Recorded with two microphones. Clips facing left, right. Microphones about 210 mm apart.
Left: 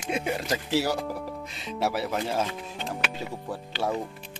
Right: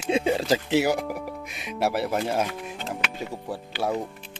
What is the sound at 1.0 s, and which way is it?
Speech, 15° right (ahead or behind).